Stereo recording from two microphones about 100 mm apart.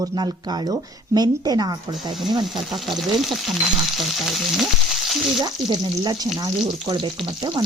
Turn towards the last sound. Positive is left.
turn(degrees=-45)  # may be behind; listen again after turning